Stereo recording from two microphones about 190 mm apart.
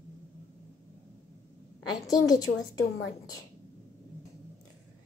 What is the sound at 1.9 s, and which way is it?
A woman's voice, 20° left (ahead or behind).